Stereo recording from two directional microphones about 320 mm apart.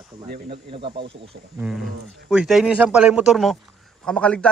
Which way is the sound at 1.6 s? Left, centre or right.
Centre.